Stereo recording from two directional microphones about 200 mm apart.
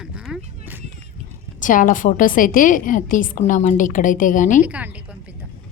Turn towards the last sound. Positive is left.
turn(degrees=-5)  # may be behind; listen again after turning